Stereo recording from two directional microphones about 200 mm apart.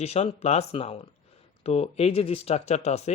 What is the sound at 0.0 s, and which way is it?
Speech, 30° left (ahead or behind).